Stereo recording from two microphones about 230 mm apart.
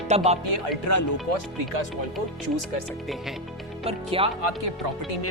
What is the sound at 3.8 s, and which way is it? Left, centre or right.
Speech, right.